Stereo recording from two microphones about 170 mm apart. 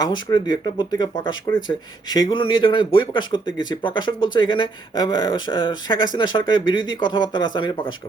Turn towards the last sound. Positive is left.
turn(degrees=30)  # may be behind; listen again after turning